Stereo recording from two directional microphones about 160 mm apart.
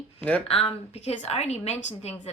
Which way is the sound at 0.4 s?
35° left (ahead or behind).